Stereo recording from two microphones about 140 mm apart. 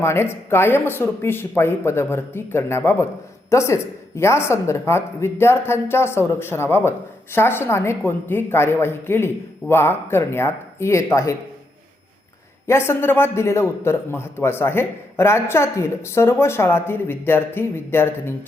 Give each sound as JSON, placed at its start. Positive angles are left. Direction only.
{"t": 0.0, "sound": "a man's voice", "side_deg": 20}
{"t": 12.6, "sound": "a man's voice", "side_deg": 20}